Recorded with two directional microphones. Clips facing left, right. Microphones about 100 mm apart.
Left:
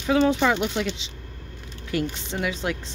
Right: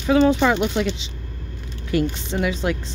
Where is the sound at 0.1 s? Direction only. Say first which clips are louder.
Right 4 dB; 45° right (ahead or behind).